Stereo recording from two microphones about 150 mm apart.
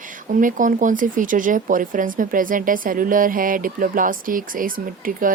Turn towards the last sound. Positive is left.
turn(degrees=-65)  # may be behind; listen again after turning